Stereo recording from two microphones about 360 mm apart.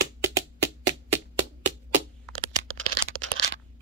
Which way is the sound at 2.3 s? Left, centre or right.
Right.